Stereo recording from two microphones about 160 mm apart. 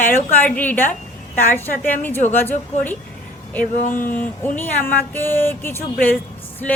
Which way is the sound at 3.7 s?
55° left (ahead or behind).